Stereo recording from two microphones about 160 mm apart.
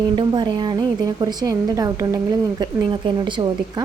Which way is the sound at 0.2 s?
30° right (ahead or behind).